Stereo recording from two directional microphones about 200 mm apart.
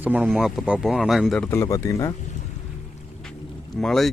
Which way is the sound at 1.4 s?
15° left (ahead or behind).